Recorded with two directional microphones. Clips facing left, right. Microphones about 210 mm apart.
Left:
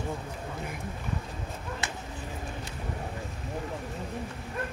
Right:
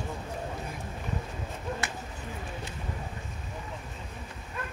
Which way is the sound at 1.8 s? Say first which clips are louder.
Even; 20° left (ahead or behind).